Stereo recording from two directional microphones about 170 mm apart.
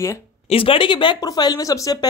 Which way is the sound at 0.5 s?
30° left (ahead or behind).